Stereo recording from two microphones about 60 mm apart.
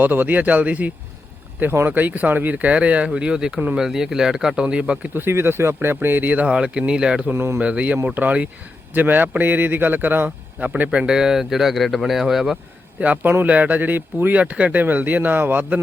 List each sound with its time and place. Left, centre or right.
0.0 s speech: right
5.1 s a man's voice: right
6.5 s speech: centre
7.3 s speech: right
7.6 s a man's voice: right
10.2 s speech: right; by 12.5 s centre
13.0 s speech: right